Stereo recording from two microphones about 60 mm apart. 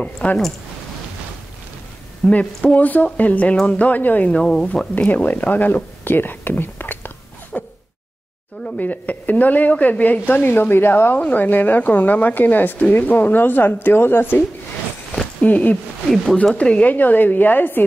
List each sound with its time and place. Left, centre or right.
0.0 s speech: left
2.2 s speech: left
4.3 s speech: centre
4.9 s speech: left
7.5 s zipper: centre
8.7 s speech: left
15.4 s speech: left
16.9 s speech: left